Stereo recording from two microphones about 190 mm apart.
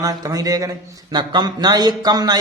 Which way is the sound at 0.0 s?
20° right (ahead or behind).